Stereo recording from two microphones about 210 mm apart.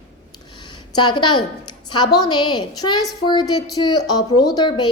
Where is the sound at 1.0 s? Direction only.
20° left (ahead or behind).